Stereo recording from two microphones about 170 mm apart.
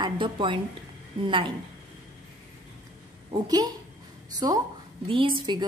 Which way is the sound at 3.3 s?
20° right (ahead or behind).